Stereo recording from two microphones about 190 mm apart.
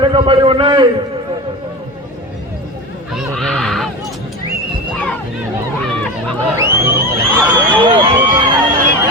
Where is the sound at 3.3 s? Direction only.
5° left (ahead or behind).